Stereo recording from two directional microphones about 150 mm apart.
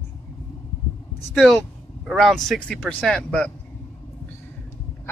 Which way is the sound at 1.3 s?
5° left (ahead or behind).